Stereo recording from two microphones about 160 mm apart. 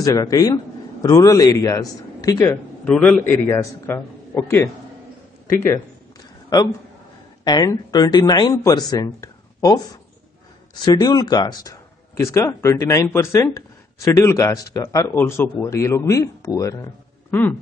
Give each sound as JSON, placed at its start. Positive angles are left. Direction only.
{"t": 0.0, "sound": "speech", "side_deg": 20}
{"t": 2.8, "sound": "a man's voice", "side_deg": 5}
{"t": 7.4, "sound": "speech", "side_deg": 25}